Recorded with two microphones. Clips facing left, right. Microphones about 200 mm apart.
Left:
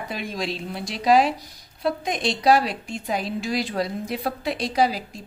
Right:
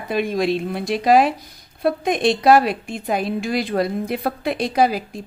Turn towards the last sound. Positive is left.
turn(degrees=-55)  # may be behind; listen again after turning